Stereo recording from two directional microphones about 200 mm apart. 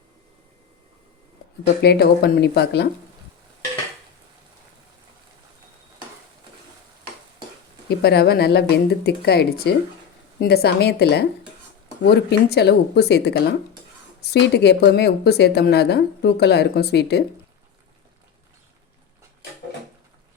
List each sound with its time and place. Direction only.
1.8 s speech: 55° left (ahead or behind)
7.9 s speech: 55° left (ahead or behind)